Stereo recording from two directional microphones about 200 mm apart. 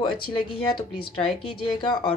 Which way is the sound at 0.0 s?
25° left (ahead or behind).